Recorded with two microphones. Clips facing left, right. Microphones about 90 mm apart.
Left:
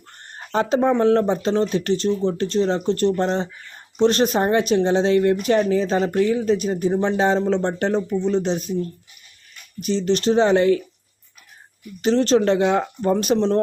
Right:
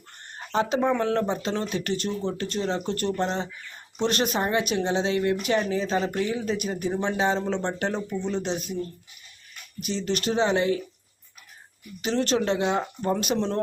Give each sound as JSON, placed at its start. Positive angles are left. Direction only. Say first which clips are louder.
{"t": 0.5, "sound": "speech", "louder": "left 5 dB", "side_deg": 40}
{"t": 9.8, "sound": "speech", "louder": "left 8 dB", "side_deg": 35}
{"t": 12.0, "sound": "speech", "louder": "left 7 dB", "side_deg": 35}